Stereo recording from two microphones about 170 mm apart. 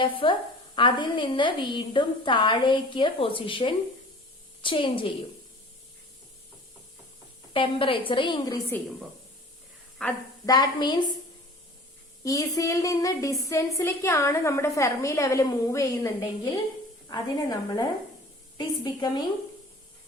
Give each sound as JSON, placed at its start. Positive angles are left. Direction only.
{"t": 0.0, "sound": "a woman's voice", "side_deg": 30}
{"t": 7.5, "sound": "a woman's voice", "side_deg": 30}
{"t": 10.0, "sound": "a woman's voice", "side_deg": 5}
{"t": 10.4, "sound": "a woman's voice", "side_deg": 25}
{"t": 12.2, "sound": "a woman's voice", "side_deg": 20}